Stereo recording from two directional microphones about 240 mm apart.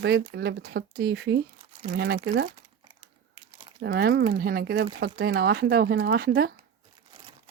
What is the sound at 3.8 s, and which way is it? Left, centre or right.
Speech, right.